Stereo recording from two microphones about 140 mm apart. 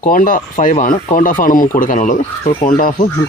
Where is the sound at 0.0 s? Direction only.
75° left (ahead or behind).